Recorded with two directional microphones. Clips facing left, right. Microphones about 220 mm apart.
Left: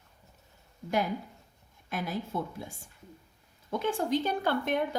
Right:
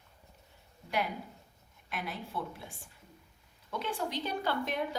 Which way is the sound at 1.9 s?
45° left (ahead or behind).